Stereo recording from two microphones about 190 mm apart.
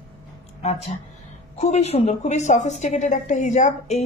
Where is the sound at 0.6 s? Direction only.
35° left (ahead or behind).